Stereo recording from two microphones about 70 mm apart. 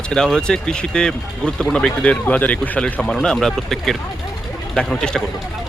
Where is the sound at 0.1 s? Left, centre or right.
Centre.